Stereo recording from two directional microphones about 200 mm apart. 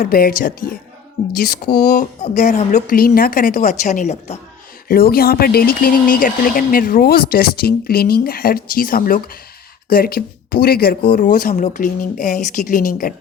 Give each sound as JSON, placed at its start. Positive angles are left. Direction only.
{"t": 0.0, "sound": "speech", "side_deg": 45}
{"t": 4.9, "sound": "speech", "side_deg": 50}